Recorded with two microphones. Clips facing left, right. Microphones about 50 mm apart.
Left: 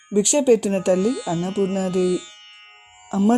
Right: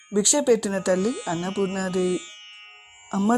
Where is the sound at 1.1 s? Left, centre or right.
Right.